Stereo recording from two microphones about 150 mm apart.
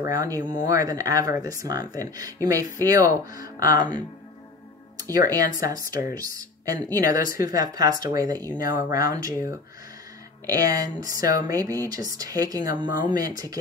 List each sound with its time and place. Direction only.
0.0 s speech: 25° right (ahead or behind)
3.7 s speech: 25° right (ahead or behind)
5.1 s speech: 25° right (ahead or behind)
10.5 s speech: 25° right (ahead or behind)